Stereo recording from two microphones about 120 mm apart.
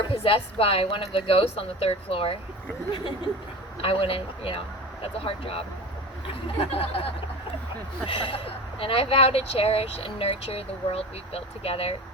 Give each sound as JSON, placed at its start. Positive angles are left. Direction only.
{"t": 0.0, "sound": "speech", "side_deg": 50}
{"t": 3.8, "sound": "speech", "side_deg": 50}